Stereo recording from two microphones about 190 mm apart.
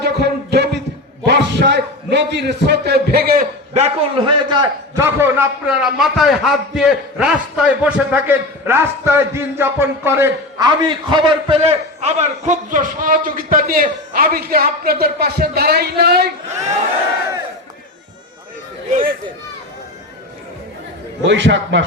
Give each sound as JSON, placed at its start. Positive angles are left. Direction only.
{"t": 0.0, "sound": "a sound", "side_deg": -60}
{"t": 3.8, "sound": "a man's voice", "side_deg": -35}
{"t": 4.4, "sound": "a man's voice", "side_deg": -20}
{"t": 10.8, "sound": "a man's voice", "side_deg": -25}
{"t": 21.2, "sound": "a man's voice", "side_deg": -75}